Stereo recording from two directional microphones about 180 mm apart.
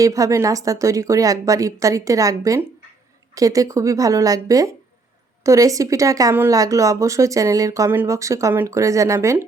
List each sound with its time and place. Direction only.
0.0 s a woman's voice: 20° right (ahead or behind)